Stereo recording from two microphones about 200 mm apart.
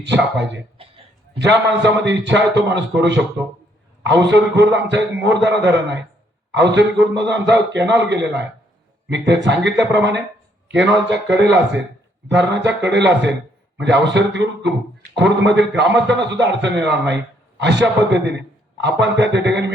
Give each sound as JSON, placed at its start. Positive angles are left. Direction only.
{"t": 0.3, "sound": "a man's voice", "side_deg": -60}
{"t": 4.0, "sound": "a man's voice", "side_deg": -60}